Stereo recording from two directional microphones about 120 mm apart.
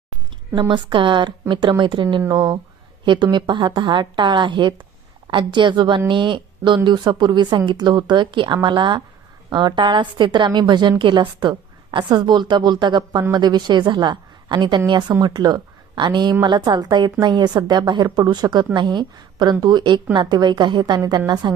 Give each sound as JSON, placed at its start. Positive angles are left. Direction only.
{"t": 0.7, "sound": "a woman's voice", "side_deg": -45}